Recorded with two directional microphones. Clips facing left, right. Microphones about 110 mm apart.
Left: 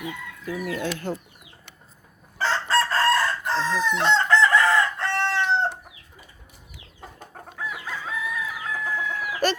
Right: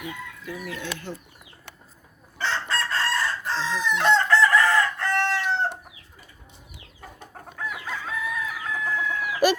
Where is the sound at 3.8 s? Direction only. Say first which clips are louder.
Right 3 dB; 35° left (ahead or behind).